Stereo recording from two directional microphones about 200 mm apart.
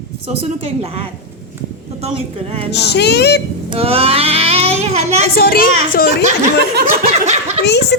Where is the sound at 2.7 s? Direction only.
55° left (ahead or behind).